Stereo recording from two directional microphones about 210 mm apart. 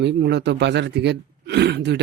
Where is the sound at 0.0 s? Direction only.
55° right (ahead or behind).